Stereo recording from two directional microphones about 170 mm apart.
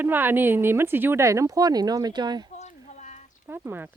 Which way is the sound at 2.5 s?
45° left (ahead or behind).